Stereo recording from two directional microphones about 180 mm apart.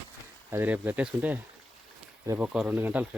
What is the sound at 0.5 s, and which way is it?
Speech, 10° right (ahead or behind).